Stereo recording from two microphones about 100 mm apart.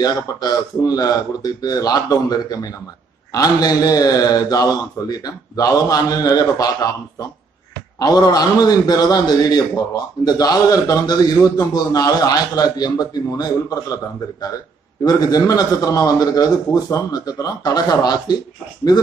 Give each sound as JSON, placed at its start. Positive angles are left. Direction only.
{"t": 0.0, "sound": "a man's voice", "side_deg": 40}
{"t": 15.0, "sound": "a man's voice", "side_deg": 40}